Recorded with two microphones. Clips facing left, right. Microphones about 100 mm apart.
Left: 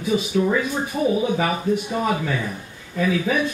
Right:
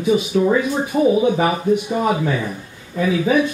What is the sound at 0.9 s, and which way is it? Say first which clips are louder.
Speech: right 6 dB; 55° right (ahead or behind).